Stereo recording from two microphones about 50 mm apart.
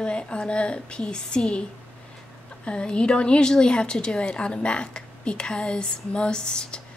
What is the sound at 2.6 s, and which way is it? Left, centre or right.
A woman's voice, centre.